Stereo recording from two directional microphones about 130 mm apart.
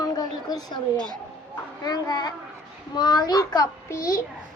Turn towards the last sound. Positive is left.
turn(degrees=25)  # may be behind; listen again after turning